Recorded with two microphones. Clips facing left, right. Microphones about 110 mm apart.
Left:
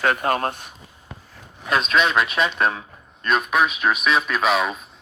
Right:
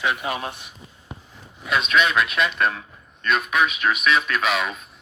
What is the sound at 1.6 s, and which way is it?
Speech, centre (ahead or behind).